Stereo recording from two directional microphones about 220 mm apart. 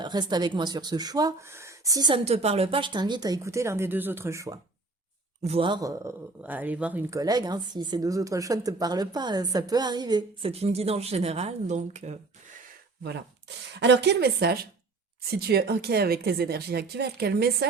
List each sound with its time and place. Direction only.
0.0 s speech: 20° right (ahead or behind)
5.4 s speech: 25° right (ahead or behind)
13.7 s speech: 50° right (ahead or behind)